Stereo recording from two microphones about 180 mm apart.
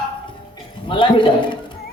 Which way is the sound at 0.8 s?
30° left (ahead or behind).